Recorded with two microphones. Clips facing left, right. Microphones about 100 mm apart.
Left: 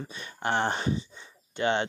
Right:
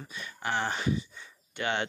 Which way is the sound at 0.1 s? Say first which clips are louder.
Left 3 dB; 30° left (ahead or behind).